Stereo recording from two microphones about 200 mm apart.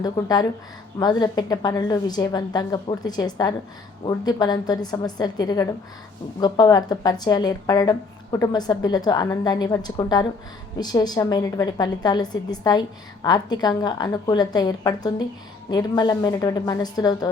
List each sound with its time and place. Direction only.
0.0 s a woman's voice: 20° left (ahead or behind)